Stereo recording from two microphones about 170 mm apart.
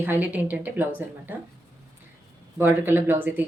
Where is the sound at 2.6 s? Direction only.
10° right (ahead or behind).